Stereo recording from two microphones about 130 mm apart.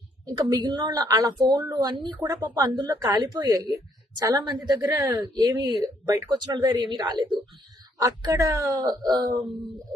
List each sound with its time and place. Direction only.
0.3 s a woman's voice: 30° right (ahead or behind)